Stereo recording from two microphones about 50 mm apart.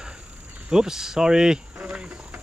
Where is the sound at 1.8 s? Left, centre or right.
Right.